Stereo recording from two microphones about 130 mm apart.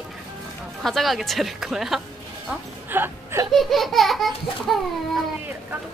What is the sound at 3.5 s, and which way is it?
Laughter, centre (ahead or behind).